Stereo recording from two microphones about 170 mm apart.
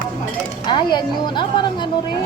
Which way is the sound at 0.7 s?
25° left (ahead or behind).